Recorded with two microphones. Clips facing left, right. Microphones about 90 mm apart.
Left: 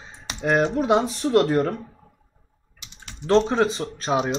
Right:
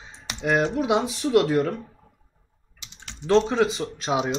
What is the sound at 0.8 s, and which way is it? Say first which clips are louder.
Speech: left 3 dB; 40° left (ahead or behind).